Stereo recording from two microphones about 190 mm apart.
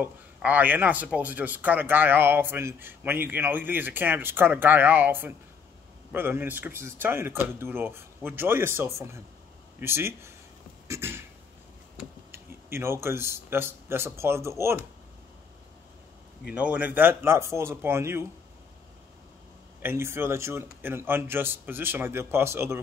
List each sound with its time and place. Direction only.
0.0 s speech: 10° right (ahead or behind)
16.4 s speech: 5° right (ahead or behind)
19.8 s speech: 10° right (ahead or behind)